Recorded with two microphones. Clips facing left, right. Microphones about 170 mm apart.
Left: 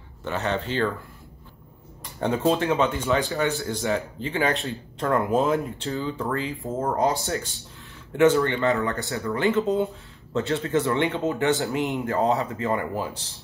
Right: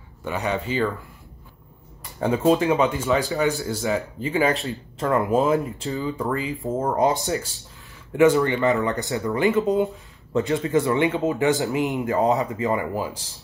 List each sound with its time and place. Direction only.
0.2 s speech: 10° right (ahead or behind)
2.1 s speech: 5° right (ahead or behind)
7.0 s speech: 20° right (ahead or behind)